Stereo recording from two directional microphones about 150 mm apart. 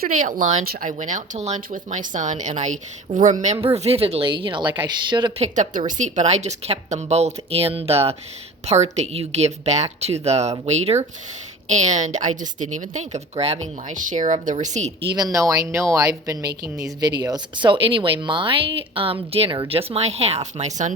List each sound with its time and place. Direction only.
0.0 s speech: 60° right (ahead or behind)
0.6 s speech: 85° right
0.9 s speech: 55° right (ahead or behind)
3.1 s speech: 65° right (ahead or behind)
3.4 s a woman's voice: 50° right (ahead or behind); by 5.3 s 30° right (ahead or behind)
5.4 s a woman's voice: 55° right (ahead or behind)
15.1 s speech: 25° right (ahead or behind); by 20.9 s 50° right (ahead or behind)